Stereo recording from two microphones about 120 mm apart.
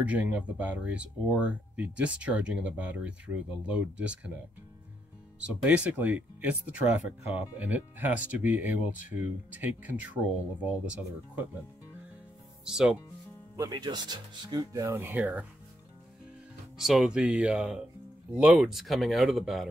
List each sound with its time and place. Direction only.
0.0 s speech: 10° right (ahead or behind)
5.5 s speech: 10° right (ahead or behind)
12.6 s speech: 5° right (ahead or behind)
13.6 s speech: 35° right (ahead or behind); by 15.4 s 15° right (ahead or behind)
16.7 s speech: 5° right (ahead or behind)